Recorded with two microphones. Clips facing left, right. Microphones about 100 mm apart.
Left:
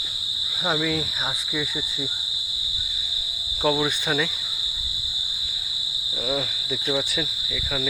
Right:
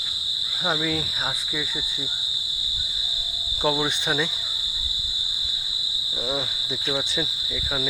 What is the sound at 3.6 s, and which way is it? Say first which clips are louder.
Cricket: left 1 dB; 25° right (ahead or behind).